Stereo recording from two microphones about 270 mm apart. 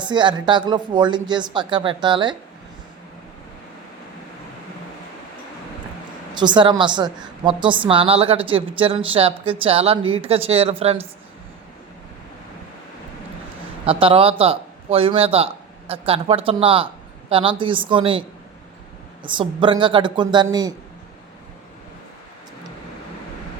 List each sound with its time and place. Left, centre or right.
0.0 s speech: centre
6.3 s a woman's voice: centre
13.8 s a woman's voice: centre